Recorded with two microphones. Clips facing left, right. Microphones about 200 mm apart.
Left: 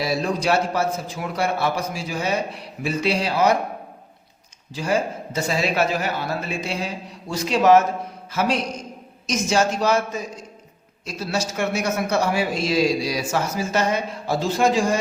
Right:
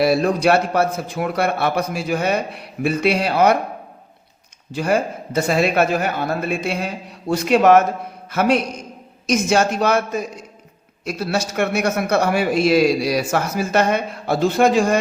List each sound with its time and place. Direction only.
0.0 s a man's voice: 60° right (ahead or behind)
4.7 s a man's voice: 60° right (ahead or behind)